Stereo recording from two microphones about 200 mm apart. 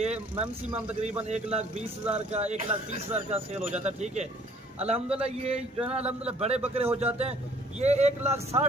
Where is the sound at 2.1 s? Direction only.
30° right (ahead or behind).